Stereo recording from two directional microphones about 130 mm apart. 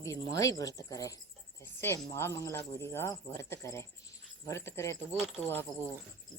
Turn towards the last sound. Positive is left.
turn(degrees=15)  # may be behind; listen again after turning